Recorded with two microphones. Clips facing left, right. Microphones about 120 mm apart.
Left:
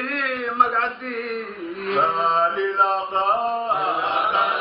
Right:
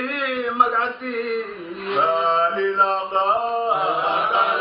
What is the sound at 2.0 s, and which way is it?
Mantra, centre (ahead or behind).